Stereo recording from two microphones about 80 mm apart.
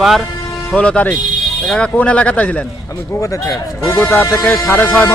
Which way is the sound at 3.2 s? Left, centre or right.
Left.